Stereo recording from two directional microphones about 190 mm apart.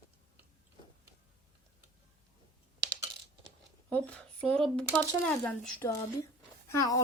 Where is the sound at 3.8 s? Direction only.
10° left (ahead or behind).